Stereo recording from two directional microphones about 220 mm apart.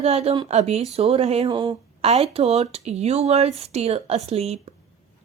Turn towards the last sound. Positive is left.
turn(degrees=-30)  # may be behind; listen again after turning